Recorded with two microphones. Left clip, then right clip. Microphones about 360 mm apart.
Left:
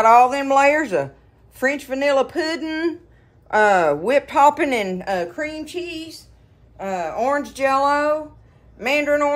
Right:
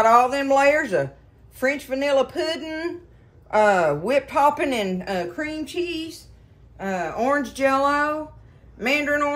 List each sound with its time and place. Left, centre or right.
0.0 s speech: centre